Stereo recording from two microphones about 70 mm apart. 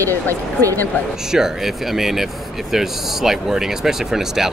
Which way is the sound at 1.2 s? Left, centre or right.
Centre.